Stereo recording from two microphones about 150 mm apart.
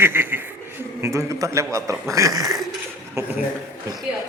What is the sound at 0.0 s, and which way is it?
A man's voice, 15° right (ahead or behind).